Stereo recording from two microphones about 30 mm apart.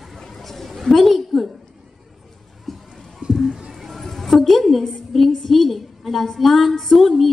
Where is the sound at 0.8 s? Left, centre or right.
Centre.